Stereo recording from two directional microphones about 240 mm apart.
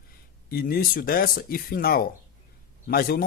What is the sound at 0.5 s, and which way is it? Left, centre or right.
Speech, left.